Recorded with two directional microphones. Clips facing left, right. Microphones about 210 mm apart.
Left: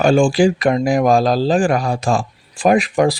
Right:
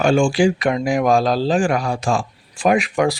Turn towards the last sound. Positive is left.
turn(degrees=35)  # may be behind; listen again after turning